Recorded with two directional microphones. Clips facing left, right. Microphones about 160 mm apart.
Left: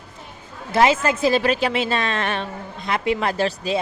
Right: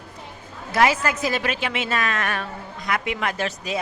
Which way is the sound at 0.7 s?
25° left (ahead or behind).